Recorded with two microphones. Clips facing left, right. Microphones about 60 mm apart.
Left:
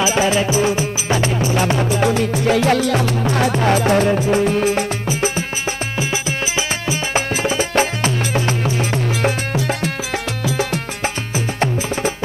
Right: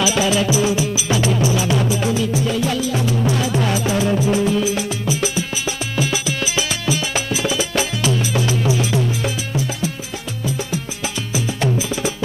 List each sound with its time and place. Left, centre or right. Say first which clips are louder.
0.0 s music: left 1 dB; left
1.9 s music: left 3 dB; left
5.9 s music: right 3 dB; left
11.3 s music: right 2 dB; left